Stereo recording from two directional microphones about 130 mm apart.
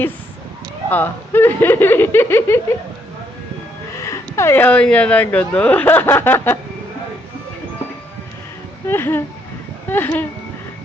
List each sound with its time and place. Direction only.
0.9 s speech: 15° left (ahead or behind)
4.0 s speech: 20° left (ahead or behind)
8.9 s speech: 15° left (ahead or behind)